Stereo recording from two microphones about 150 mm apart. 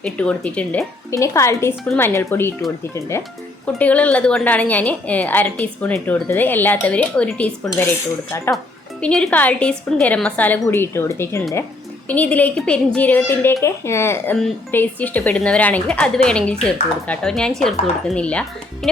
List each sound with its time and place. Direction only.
0.0 s a woman's voice: 10° left (ahead or behind)
1.1 s a woman's voice: 20° left (ahead or behind)
7.6 s a woman's voice: 20° left (ahead or behind)
9.0 s a woman's voice: 5° left (ahead or behind)